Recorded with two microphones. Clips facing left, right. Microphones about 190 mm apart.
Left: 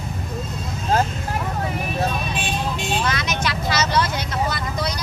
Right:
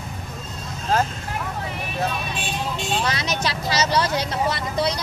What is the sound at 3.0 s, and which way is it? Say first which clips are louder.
Vehicle: left 1 dB; 35° right (ahead or behind).